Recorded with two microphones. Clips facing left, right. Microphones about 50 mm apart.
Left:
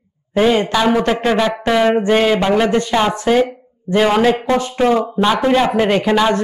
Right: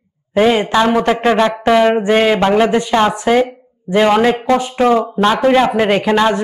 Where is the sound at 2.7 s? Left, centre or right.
Centre.